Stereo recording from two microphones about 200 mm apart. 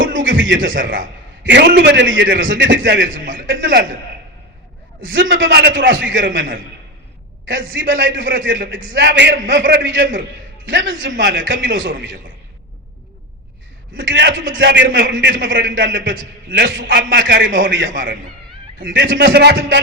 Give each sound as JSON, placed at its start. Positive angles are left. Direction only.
{"t": 0.1, "sound": "a sound", "side_deg": -70}
{"t": 1.5, "sound": "a man's voice", "side_deg": -60}
{"t": 5.3, "sound": "a man's voice", "side_deg": -60}
{"t": 7.4, "sound": "a man's voice", "side_deg": -70}
{"t": 13.9, "sound": "a man's voice", "side_deg": -60}